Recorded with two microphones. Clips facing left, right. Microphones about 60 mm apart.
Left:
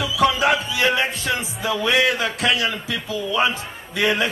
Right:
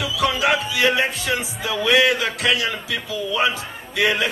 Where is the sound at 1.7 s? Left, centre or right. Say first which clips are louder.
Right 2 dB; left.